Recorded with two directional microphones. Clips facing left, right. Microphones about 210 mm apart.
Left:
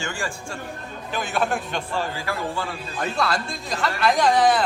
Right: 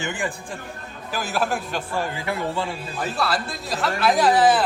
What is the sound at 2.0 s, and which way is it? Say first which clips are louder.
Speech: right 1 dB; 20° right (ahead or behind).